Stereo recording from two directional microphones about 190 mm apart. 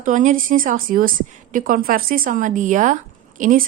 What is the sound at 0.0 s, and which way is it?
A woman's voice, 40° right (ahead or behind).